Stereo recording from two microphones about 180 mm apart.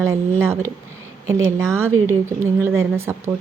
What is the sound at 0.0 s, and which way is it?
Speech, 15° right (ahead or behind).